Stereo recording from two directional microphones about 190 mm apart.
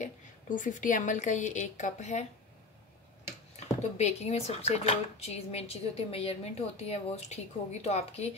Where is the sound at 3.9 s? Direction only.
35° left (ahead or behind).